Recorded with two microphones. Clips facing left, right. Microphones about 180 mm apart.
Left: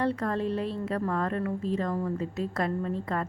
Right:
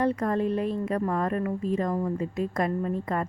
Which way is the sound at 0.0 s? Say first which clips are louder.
Right 3 dB; 15° right (ahead or behind).